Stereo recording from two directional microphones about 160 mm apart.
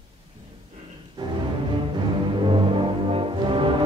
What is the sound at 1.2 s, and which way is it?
Music, 25° right (ahead or behind).